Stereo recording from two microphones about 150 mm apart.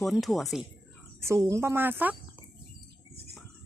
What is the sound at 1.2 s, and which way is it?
Speech, 20° right (ahead or behind).